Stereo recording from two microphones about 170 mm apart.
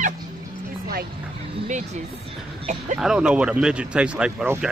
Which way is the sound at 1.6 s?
45° right (ahead or behind).